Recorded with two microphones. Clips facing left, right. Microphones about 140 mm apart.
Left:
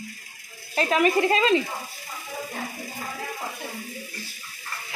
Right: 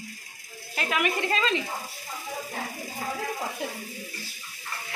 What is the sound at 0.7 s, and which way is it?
Speech, 35° left (ahead or behind).